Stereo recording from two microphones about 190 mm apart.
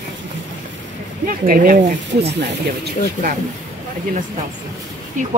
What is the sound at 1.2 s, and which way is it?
Speech, 50° right (ahead or behind).